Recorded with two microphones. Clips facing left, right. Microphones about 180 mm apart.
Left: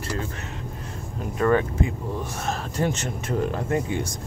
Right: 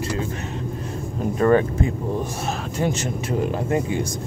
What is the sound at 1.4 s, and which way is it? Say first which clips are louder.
Speech: right 3 dB; 35° right (ahead or behind).